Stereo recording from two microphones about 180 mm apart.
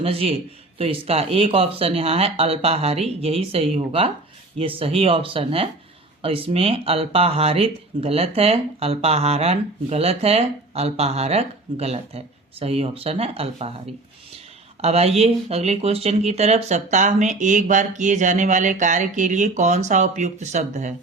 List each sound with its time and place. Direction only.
0.0 s speech: 30° right (ahead or behind)